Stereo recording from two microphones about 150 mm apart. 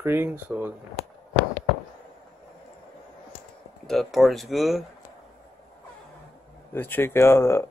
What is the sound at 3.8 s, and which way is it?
Speech, centre (ahead or behind).